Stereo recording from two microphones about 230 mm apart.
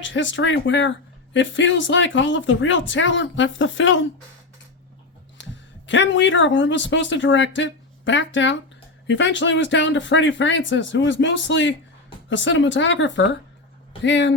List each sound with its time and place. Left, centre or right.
0.0 s speech: left
5.4 s speech: left